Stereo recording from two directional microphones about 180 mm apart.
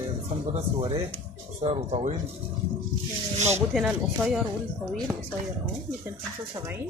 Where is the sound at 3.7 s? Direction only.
5° right (ahead or behind).